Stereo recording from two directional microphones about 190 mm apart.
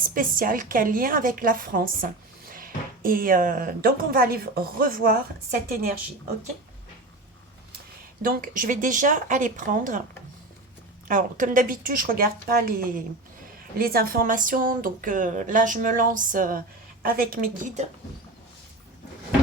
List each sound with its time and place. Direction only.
0.1 s speech: 50° right (ahead or behind)
8.2 s speech: 45° right (ahead or behind)
11.1 s speech: 45° right (ahead or behind)